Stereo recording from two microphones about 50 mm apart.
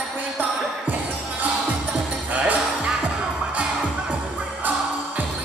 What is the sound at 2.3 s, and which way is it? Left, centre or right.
Music, right.